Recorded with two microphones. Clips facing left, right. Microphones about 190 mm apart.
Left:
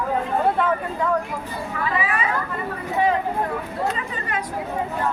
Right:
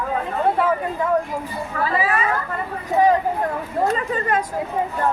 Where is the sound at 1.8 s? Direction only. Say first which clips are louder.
Right 3 dB; 35° right (ahead or behind).